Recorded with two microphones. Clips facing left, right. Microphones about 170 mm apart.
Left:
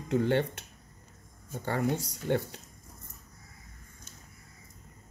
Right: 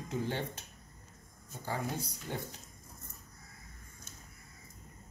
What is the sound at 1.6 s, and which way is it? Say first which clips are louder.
Speech: left 7 dB; 70° left (ahead or behind).